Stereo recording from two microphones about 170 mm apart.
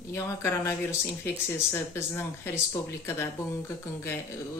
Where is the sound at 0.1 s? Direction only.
15° left (ahead or behind).